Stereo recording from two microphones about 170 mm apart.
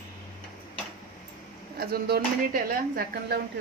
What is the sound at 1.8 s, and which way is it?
Speech, 65° right (ahead or behind).